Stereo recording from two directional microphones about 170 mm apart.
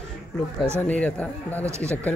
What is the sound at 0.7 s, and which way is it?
Speech, 10° left (ahead or behind).